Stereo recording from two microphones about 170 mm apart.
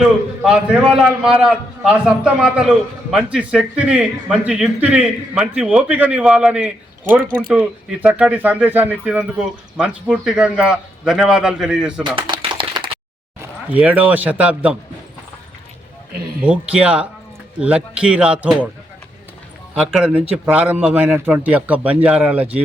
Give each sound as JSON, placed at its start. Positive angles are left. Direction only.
{"t": 0.0, "sound": "a man's voice", "side_deg": -5}
{"t": 12.0, "sound": "a sound", "side_deg": -30}
{"t": 13.7, "sound": "a man's voice", "side_deg": -10}
{"t": 16.4, "sound": "a man's voice", "side_deg": -5}
{"t": 19.7, "sound": "a man's voice", "side_deg": -5}